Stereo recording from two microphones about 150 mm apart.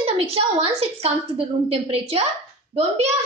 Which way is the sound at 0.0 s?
40° right (ahead or behind).